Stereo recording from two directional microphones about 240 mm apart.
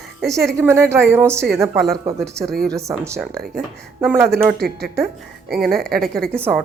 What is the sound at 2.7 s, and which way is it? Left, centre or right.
Speech, centre.